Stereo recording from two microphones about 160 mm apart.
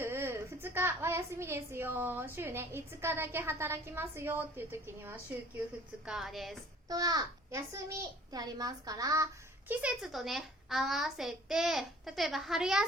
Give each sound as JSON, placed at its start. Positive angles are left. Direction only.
{"t": 0.0, "sound": "a woman's voice", "side_deg": -15}
{"t": 6.1, "sound": "a child's voice", "side_deg": 0}
{"t": 6.8, "sound": "a child's voice", "side_deg": -25}
{"t": 9.8, "sound": "a child's voice", "side_deg": 0}